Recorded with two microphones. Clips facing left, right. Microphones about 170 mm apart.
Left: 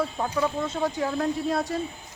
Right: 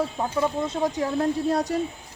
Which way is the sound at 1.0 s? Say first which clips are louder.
Right 3 dB; 35° right (ahead or behind).